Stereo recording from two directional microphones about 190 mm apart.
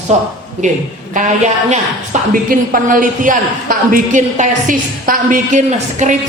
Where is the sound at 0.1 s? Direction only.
35° right (ahead or behind).